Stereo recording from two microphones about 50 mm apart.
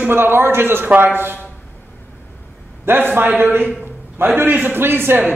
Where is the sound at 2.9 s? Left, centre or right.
Right.